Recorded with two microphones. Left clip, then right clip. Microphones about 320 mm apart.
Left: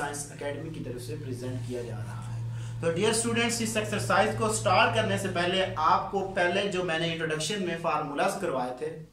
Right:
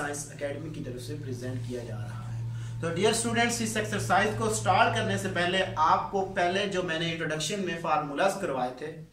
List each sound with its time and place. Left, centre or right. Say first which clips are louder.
2.8 s speech: even; centre